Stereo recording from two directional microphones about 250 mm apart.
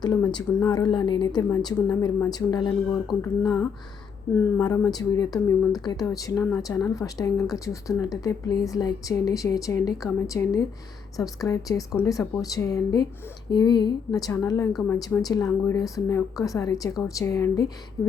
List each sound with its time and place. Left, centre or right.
0.0 s speech: centre
4.5 s speech: centre
14.7 s speech: centre
14.9 s speech: centre